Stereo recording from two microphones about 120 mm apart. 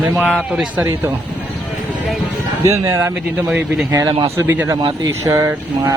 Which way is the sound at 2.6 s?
20° right (ahead or behind).